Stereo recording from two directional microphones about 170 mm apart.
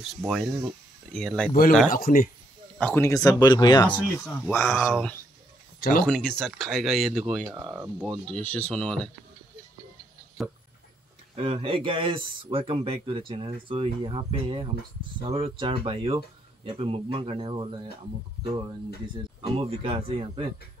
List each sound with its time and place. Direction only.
0.2 s speech: centre (ahead or behind)
1.9 s speech: 55° left (ahead or behind)
2.8 s speech: 15° left (ahead or behind)
3.8 s speech: 10° left (ahead or behind)
4.8 s speech: centre (ahead or behind)
11.3 s speech: 35° right (ahead or behind)
19.4 s speech: 35° right (ahead or behind)